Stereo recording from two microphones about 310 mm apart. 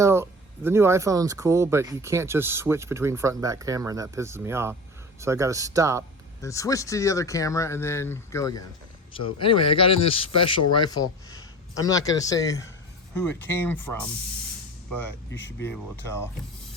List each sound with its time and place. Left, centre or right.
0.0 s speech: centre
6.4 s speech: centre
15.5 s speech: centre